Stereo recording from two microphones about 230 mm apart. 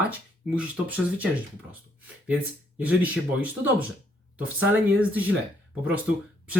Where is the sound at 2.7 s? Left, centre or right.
Centre.